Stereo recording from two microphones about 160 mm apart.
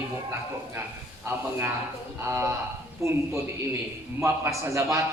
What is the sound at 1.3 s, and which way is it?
A man's voice, 15° right (ahead or behind).